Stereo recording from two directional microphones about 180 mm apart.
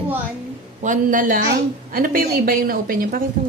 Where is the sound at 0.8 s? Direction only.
45° right (ahead or behind).